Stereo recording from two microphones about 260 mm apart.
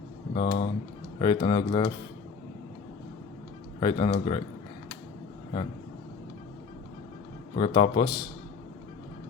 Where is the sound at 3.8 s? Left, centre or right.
Left.